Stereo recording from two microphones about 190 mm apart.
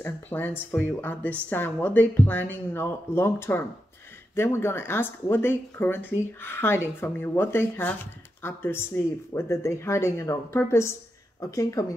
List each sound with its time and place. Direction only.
0.0 s speech: 10° left (ahead or behind)